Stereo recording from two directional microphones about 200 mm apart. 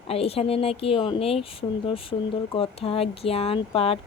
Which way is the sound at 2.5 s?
25° left (ahead or behind).